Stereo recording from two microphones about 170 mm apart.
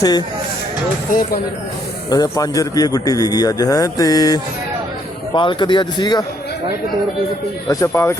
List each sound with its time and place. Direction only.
0.0 s a man's voice: 25° left (ahead or behind)
2.0 s a man's voice: 20° left (ahead or behind)
7.7 s a man's voice: 20° left (ahead or behind)